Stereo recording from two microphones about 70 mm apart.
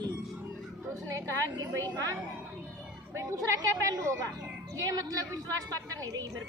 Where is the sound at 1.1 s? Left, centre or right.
Right.